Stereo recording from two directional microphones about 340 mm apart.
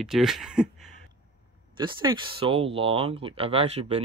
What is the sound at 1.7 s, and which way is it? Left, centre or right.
Speech, centre.